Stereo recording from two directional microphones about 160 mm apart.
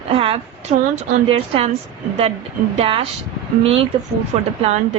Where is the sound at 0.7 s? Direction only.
55° right (ahead or behind).